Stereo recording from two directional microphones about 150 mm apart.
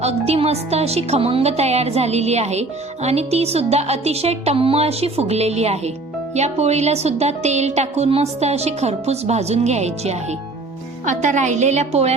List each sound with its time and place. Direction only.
0.0 s a woman's voice: 45° right (ahead or behind)